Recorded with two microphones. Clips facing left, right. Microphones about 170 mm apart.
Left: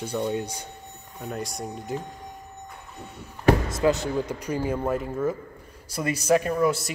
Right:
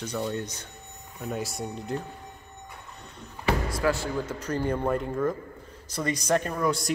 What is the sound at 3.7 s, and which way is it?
Speech, 20° left (ahead or behind).